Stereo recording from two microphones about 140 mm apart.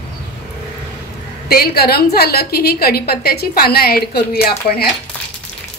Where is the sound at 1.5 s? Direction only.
90° left.